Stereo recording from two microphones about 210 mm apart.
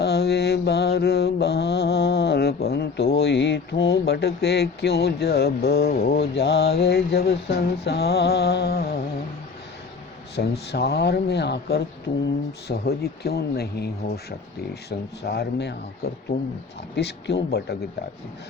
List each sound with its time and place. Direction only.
0.0 s mantra: 50° left (ahead or behind)
10.3 s speech: 50° left (ahead or behind)